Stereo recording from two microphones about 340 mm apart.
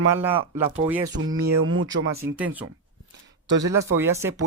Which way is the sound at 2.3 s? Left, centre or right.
Centre.